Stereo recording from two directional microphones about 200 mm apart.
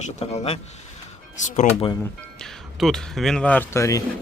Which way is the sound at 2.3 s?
Centre (ahead or behind).